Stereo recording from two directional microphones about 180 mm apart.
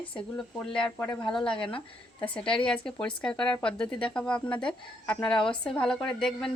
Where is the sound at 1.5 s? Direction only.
30° left (ahead or behind).